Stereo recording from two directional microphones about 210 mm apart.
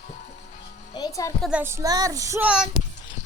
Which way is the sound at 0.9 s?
15° left (ahead or behind).